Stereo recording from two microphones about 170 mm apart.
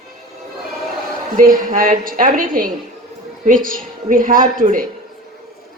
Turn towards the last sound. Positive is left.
turn(degrees=-55)  # may be behind; listen again after turning